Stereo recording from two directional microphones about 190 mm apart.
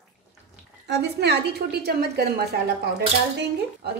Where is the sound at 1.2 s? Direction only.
60° right (ahead or behind).